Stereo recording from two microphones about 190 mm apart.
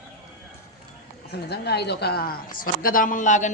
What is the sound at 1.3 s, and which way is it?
A woman's voice, 60° left (ahead or behind).